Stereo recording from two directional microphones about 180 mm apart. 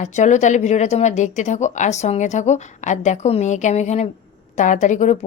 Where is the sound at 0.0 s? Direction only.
40° left (ahead or behind).